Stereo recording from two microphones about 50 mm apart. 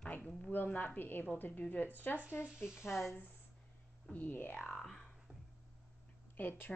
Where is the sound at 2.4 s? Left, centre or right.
Centre.